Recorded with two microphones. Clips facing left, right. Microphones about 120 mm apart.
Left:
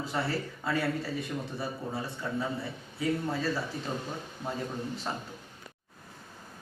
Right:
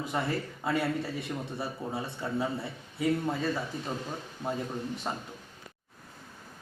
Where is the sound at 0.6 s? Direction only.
25° right (ahead or behind).